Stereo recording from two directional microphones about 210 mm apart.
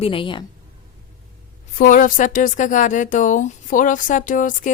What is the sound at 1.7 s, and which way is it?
A woman's voice, 40° left (ahead or behind).